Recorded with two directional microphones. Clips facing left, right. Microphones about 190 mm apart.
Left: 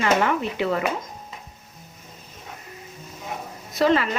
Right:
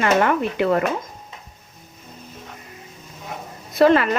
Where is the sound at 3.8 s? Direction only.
55° right (ahead or behind).